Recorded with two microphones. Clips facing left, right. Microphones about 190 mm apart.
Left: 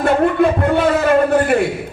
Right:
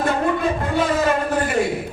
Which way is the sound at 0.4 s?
60° left (ahead or behind).